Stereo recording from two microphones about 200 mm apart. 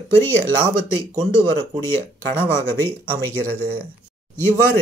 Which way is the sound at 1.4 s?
20° right (ahead or behind).